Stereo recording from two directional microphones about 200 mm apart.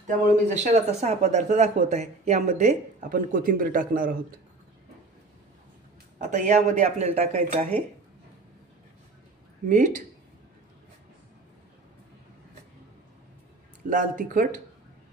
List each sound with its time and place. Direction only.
0.0 s speech: 40° right (ahead or behind)
6.2 s speech: 35° right (ahead or behind)
9.7 s speech: 40° right (ahead or behind)
13.8 s speech: 40° right (ahead or behind)